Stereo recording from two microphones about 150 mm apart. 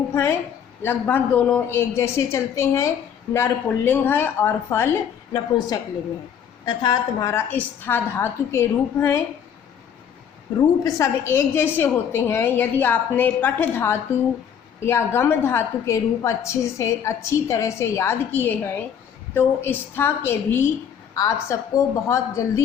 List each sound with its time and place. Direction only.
0.1 s a sound: 15° left (ahead or behind)
0.8 s a woman's voice: 15° left (ahead or behind)
6.8 s a woman's voice: 20° left (ahead or behind)
10.8 s a woman's voice: 20° left (ahead or behind)